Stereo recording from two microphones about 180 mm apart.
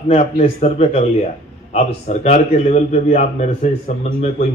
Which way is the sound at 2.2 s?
40° left (ahead or behind).